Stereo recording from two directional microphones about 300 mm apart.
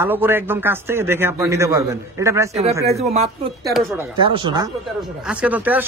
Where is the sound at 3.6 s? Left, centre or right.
Centre.